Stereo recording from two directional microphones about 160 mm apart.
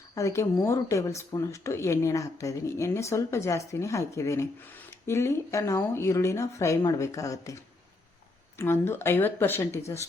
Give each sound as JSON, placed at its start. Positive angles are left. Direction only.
{"t": 0.1, "sound": "speech", "side_deg": 20}